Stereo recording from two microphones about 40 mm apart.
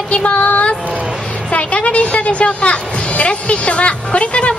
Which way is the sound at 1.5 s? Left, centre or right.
Left.